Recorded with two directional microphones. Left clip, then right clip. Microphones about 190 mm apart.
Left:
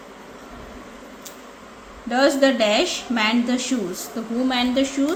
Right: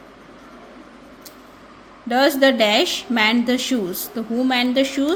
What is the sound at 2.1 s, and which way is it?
Speech, 40° right (ahead or behind).